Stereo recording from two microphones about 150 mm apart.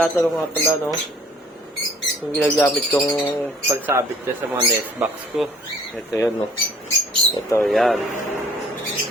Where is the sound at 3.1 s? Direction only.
30° left (ahead or behind).